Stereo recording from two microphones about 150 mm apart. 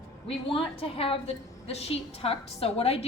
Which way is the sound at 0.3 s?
35° left (ahead or behind).